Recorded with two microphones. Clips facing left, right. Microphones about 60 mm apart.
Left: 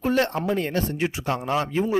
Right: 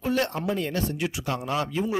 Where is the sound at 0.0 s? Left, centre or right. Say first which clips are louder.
Left 3 dB; left.